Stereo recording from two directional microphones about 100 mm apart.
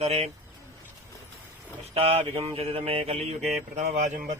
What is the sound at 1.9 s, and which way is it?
Mantra, 80° right.